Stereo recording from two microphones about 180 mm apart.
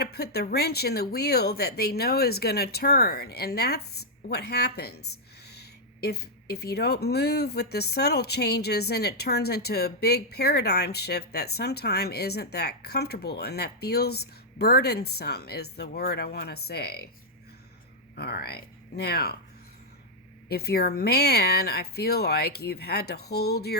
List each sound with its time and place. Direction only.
0.0 s speech: 60° left (ahead or behind)
18.2 s speech: 60° left (ahead or behind)
20.5 s speech: 60° left (ahead or behind)